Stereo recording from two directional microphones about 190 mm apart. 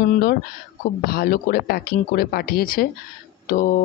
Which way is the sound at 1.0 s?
50° left (ahead or behind).